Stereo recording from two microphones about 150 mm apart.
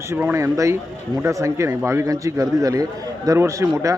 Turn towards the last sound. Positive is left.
turn(degrees=-20)  # may be behind; listen again after turning